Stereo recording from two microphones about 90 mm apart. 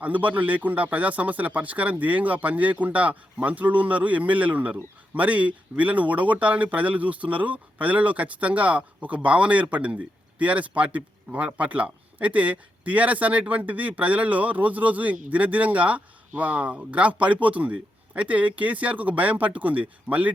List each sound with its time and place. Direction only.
0.0 s speech: 20° right (ahead or behind)